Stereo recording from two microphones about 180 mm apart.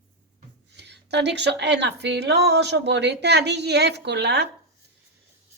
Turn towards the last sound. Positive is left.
turn(degrees=-70)  # may be behind; listen again after turning